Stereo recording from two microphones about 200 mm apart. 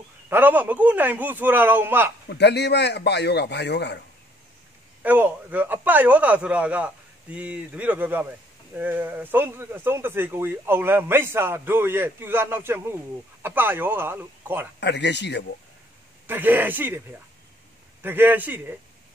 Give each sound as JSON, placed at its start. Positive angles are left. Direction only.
{"t": 0.3, "sound": "a man's voice", "side_deg": -10}
{"t": 2.2, "sound": "a man's voice", "side_deg": 55}
{"t": 5.0, "sound": "a man's voice", "side_deg": -10}
{"t": 14.8, "sound": "a man's voice", "side_deg": 60}
{"t": 16.3, "sound": "a man's voice", "side_deg": -10}